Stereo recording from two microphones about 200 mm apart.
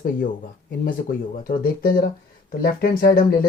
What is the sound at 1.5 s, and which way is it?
Speech, 45° left (ahead or behind).